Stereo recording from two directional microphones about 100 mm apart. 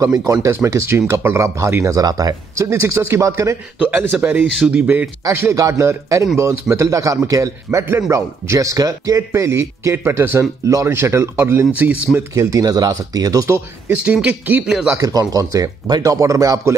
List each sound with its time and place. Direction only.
0.0 s speech: 35° right (ahead or behind)
3.8 s speech: 15° right (ahead or behind)
5.2 s a man's voice: 30° right (ahead or behind)
12.4 s a man's voice: 35° right (ahead or behind)
13.8 s speech: 10° right (ahead or behind)
14.9 s a man's voice: 35° right (ahead or behind)